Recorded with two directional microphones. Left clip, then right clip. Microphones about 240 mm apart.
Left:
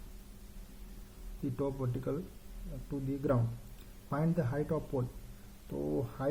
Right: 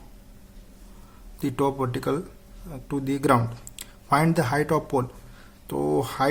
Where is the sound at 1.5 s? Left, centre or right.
Right.